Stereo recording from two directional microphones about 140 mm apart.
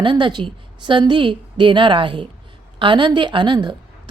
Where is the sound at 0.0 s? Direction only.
35° right (ahead or behind).